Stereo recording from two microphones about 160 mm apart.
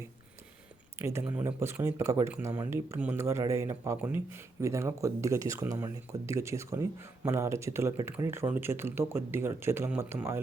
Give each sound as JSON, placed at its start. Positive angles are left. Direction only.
{"t": 0.9, "sound": "speech", "side_deg": -15}